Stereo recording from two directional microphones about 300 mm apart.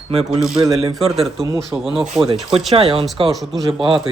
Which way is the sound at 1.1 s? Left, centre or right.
Centre.